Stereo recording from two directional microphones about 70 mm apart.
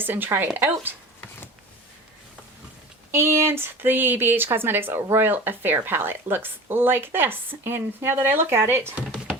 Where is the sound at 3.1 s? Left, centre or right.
Right.